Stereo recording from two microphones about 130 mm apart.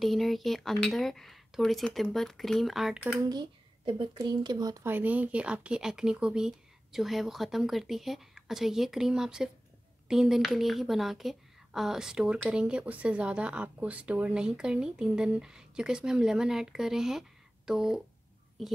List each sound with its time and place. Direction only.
0.0 s speech: centre (ahead or behind)
3.3 s speech: 35° right (ahead or behind)
4.8 s speech: 15° right (ahead or behind)